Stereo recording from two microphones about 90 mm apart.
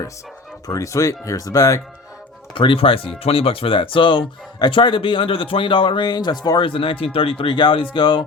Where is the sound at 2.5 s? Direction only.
75° left (ahead or behind); by 6.6 s 50° left (ahead or behind).